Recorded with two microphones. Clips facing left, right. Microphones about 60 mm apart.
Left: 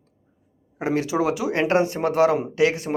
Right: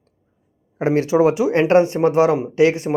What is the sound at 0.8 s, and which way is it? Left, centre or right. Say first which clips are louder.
Speech: right 7 dB; right.